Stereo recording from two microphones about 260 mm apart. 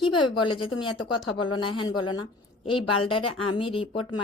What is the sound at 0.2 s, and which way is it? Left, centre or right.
A woman's voice, centre.